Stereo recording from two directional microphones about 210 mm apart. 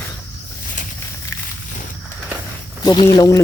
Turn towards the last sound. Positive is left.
turn(degrees=15)  # may be behind; listen again after turning